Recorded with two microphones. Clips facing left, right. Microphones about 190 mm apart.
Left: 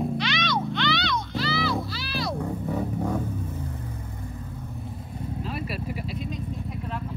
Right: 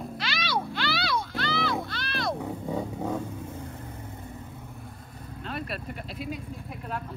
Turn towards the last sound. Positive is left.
turn(degrees=-5)  # may be behind; listen again after turning